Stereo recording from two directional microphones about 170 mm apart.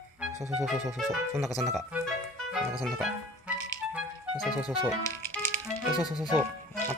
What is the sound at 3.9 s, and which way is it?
Music, 5° right (ahead or behind).